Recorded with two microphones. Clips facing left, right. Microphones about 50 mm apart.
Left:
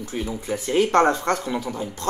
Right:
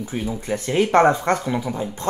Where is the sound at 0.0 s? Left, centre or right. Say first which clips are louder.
Right 2 dB; centre.